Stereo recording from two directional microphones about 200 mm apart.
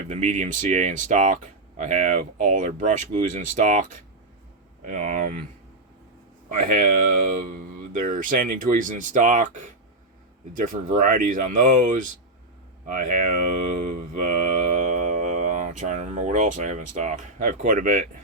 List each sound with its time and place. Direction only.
0.1 s speech: 35° right (ahead or behind)
4.9 s speech: 40° right (ahead or behind)
6.5 s speech: 40° right (ahead or behind)
7.9 s speech: 40° right (ahead or behind)
12.8 s a sound: 40° right (ahead or behind)